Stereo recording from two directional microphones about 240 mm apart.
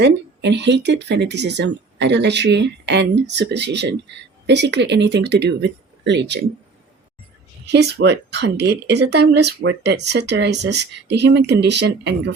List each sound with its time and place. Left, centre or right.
0.0 s speech: right
7.7 s speech: right